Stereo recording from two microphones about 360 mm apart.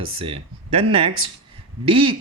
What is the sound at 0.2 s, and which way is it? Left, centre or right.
Speech, centre.